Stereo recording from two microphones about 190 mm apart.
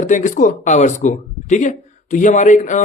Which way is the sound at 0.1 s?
40° left (ahead or behind).